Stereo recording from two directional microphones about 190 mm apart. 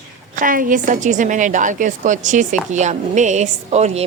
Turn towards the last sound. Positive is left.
turn(degrees=-35)  # may be behind; listen again after turning